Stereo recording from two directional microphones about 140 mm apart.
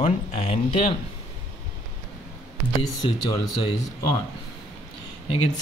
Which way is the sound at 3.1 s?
30° left (ahead or behind).